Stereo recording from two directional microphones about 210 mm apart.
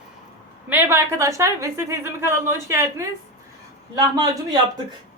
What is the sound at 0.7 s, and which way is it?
A woman's voice, 10° right (ahead or behind).